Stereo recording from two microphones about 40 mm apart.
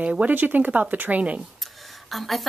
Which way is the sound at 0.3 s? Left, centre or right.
Right.